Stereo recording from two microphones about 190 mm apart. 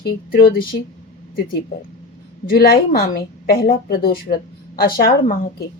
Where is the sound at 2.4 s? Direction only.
50° left (ahead or behind).